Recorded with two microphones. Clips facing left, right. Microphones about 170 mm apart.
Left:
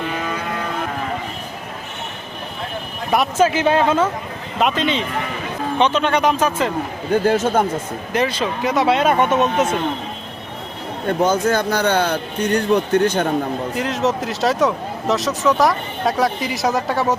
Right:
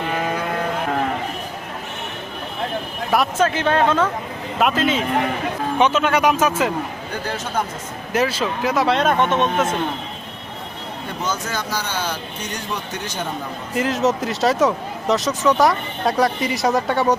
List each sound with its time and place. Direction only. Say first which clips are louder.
3.1 s speech: left 2 dB; 5° left (ahead or behind)
7.1 s speech: left 13 dB; 50° left (ahead or behind)
8.1 s speech: even; 5° right (ahead or behind)
11.2 s a man's voice: left 9 dB; 55° left (ahead or behind)
13.7 s speech: right 3 dB; centre (ahead or behind)